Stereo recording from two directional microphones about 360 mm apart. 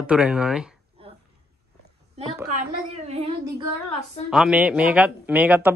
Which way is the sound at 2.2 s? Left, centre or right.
Centre.